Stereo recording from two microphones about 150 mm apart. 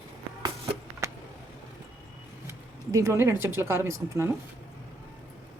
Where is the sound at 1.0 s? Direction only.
20° right (ahead or behind).